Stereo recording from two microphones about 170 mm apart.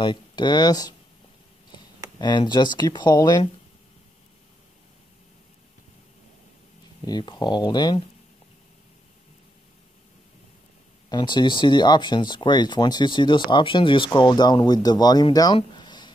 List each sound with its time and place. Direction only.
0.0 s speech: 25° left (ahead or behind)
2.1 s speech: 25° left (ahead or behind)
7.1 s speech: 25° left (ahead or behind)
11.1 s speech: 25° left (ahead or behind)